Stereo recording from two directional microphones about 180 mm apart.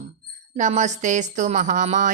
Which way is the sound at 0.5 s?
45° right (ahead or behind).